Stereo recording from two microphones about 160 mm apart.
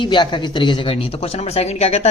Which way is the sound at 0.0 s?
30° left (ahead or behind).